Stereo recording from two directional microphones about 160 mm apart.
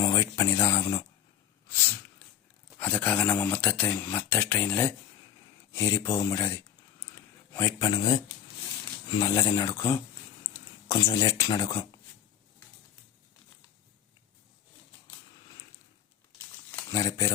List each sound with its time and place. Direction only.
0.0 s speech: 20° left (ahead or behind)
1.7 s a sound: 15° left (ahead or behind)
2.7 s speech: 10° left (ahead or behind)
7.2 s a sound: 15° left (ahead or behind)
7.9 s speech: 25° left (ahead or behind)
16.9 s speech: 20° left (ahead or behind)